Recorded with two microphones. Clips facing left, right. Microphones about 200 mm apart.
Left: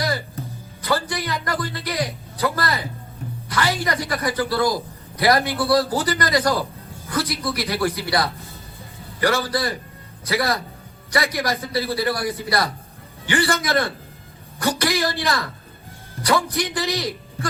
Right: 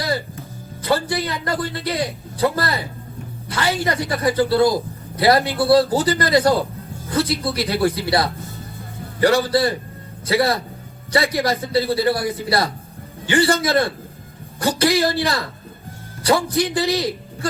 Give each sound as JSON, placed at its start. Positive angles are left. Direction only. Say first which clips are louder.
{"t": 0.8, "sound": "a man's voice", "louder": "right 3 dB", "side_deg": -30}
{"t": 16.2, "sound": "a man's voice", "louder": "right 3 dB", "side_deg": -25}
{"t": 16.6, "sound": "a man's voice", "louder": "right 5 dB", "side_deg": -15}